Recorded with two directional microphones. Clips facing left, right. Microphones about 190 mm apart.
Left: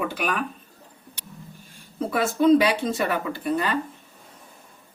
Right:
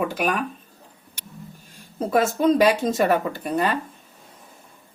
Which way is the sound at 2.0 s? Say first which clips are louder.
Even; 40° right (ahead or behind).